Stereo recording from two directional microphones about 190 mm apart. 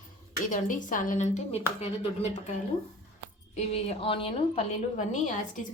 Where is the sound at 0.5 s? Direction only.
45° left (ahead or behind).